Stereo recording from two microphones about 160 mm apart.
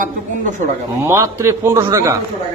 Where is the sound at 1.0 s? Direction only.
15° right (ahead or behind).